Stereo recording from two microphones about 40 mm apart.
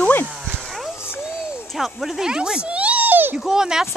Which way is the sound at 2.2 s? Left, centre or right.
Centre.